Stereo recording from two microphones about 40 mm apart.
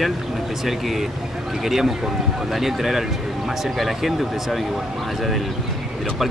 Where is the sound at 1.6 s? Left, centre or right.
Centre.